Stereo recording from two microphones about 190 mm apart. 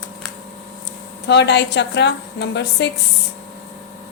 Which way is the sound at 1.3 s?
65° left (ahead or behind).